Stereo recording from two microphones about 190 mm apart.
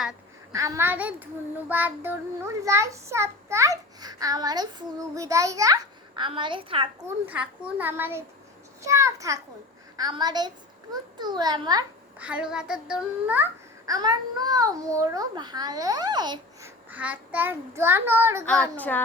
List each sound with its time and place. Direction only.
0.5 s speech: 15° right (ahead or behind)
7.3 s a child's voice: 5° right (ahead or behind)
12.2 s speech: 5° right (ahead or behind)
18.4 s speech: 5° left (ahead or behind)